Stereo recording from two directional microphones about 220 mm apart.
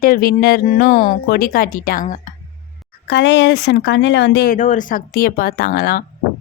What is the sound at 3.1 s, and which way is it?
Speech, 50° left (ahead or behind).